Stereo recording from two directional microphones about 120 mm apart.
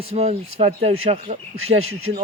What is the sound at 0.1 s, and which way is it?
Speech, 60° right (ahead or behind).